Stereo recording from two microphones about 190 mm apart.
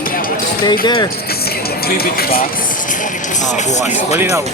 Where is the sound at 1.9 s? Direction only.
50° left (ahead or behind).